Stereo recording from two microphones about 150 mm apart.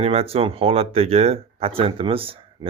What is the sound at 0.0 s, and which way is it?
Speech, 40° right (ahead or behind).